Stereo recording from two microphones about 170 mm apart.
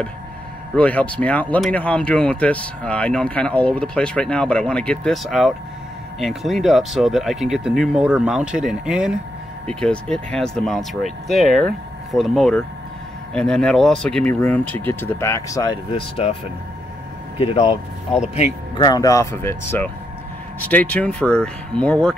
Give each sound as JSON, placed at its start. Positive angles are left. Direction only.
{"t": 0.7, "sound": "speech", "side_deg": 10}
{"t": 17.4, "sound": "speech", "side_deg": 35}
{"t": 18.8, "sound": "speech", "side_deg": 25}